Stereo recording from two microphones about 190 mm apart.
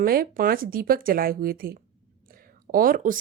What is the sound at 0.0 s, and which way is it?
A woman's voice, 50° right (ahead or behind).